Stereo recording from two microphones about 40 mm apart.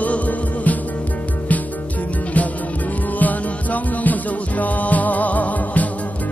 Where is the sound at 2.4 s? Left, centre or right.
Left.